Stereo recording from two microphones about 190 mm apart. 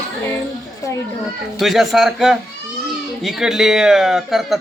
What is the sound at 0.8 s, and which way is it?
Speech, 15° left (ahead or behind).